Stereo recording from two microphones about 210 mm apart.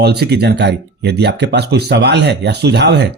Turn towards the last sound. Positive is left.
turn(degrees=-55)  # may be behind; listen again after turning